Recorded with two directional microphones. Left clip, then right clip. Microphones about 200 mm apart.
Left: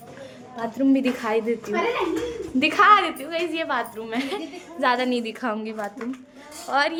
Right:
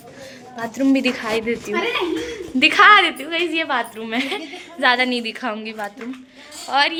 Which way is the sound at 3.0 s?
25° right (ahead or behind).